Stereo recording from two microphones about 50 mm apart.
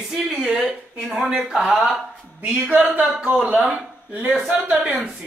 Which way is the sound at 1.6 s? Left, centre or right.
Centre.